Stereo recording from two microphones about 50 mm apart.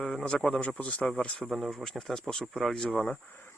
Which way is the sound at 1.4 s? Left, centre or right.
Centre.